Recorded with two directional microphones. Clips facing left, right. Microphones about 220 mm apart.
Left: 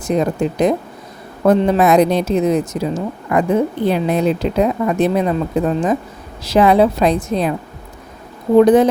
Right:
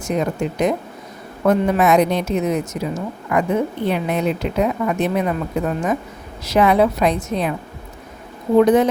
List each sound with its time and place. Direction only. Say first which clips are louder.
0.0 s a woman's voice: left 4 dB; 35° left (ahead or behind)
8.6 s a woman's voice: left 4 dB; 35° left (ahead or behind)